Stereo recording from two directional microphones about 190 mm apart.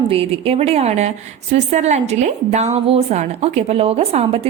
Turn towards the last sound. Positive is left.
turn(degrees=-30)  # may be behind; listen again after turning